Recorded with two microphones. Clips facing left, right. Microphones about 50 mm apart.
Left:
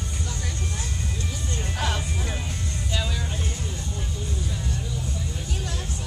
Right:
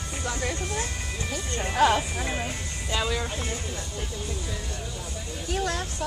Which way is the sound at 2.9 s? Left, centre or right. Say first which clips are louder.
Right 4 dB; right.